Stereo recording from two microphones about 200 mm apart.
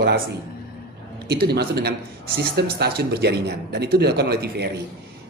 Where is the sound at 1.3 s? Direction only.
55° right (ahead or behind).